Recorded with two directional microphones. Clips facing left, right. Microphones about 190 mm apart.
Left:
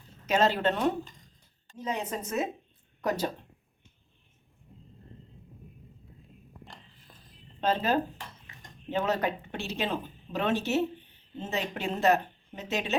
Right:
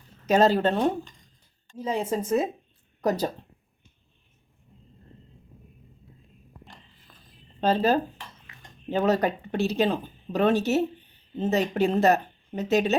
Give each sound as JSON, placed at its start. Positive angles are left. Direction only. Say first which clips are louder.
{"t": 0.3, "sound": "speech", "louder": "right 5 dB", "side_deg": -40}
{"t": 7.6, "sound": "speech", "louder": "right 5 dB", "side_deg": -35}